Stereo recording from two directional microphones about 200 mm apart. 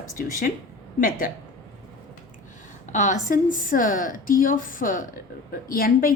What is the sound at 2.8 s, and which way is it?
A woman's voice, 40° left (ahead or behind).